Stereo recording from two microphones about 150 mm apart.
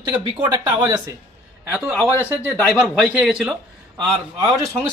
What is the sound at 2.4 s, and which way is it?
Speech, 5° right (ahead or behind).